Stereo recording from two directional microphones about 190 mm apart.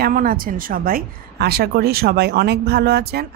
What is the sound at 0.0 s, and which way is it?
A woman's voice, 50° right (ahead or behind).